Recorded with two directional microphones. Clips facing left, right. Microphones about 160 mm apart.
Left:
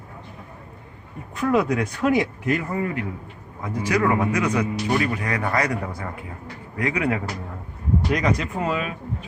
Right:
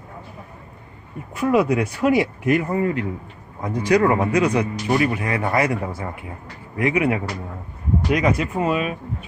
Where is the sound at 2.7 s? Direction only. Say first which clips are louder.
Right 4 dB; 30° right (ahead or behind).